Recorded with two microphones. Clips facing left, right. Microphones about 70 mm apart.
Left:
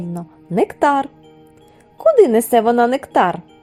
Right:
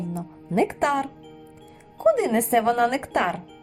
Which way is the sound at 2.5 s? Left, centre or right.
Left.